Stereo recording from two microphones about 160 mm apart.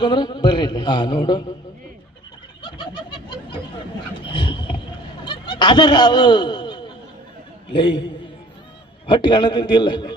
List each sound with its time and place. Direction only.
0.0 s a man's voice: 30° left (ahead or behind)
2.6 s a sound: 30° left (ahead or behind)
7.7 s a man's voice: 30° left (ahead or behind)